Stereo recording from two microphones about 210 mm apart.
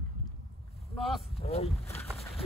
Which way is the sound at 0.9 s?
Centre (ahead or behind).